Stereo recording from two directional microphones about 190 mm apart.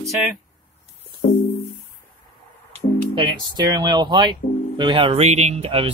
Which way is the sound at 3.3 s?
20° right (ahead or behind).